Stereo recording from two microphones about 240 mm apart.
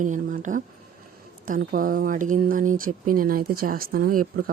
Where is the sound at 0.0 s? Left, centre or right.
Right.